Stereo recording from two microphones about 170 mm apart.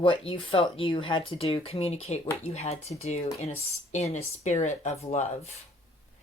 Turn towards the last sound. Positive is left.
turn(degrees=40)  # may be behind; listen again after turning